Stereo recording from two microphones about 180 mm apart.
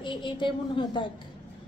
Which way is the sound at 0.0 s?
25° left (ahead or behind).